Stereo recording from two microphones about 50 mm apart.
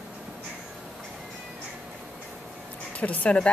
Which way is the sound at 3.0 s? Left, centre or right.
Left.